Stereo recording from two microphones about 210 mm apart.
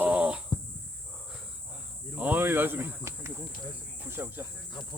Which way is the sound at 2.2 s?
10° right (ahead or behind).